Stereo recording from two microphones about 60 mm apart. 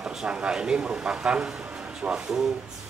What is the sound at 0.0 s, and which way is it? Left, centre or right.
Speech, centre.